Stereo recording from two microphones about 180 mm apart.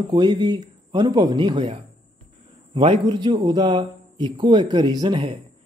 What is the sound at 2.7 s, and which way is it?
Speech, 25° right (ahead or behind).